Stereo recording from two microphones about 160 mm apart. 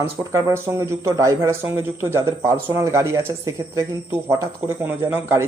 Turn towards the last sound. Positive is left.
turn(degrees=-15)  # may be behind; listen again after turning